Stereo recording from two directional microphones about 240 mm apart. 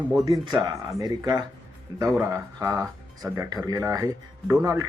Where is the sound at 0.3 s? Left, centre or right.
Centre.